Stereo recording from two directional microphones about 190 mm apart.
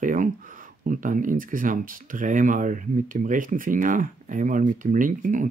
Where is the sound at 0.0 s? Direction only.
45° right (ahead or behind).